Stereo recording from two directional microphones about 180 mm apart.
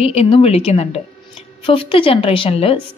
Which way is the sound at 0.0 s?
35° left (ahead or behind).